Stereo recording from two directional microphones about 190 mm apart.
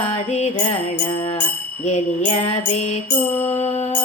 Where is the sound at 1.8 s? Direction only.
35° left (ahead or behind).